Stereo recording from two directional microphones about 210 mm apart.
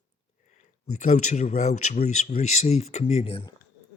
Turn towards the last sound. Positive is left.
turn(degrees=25)  # may be behind; listen again after turning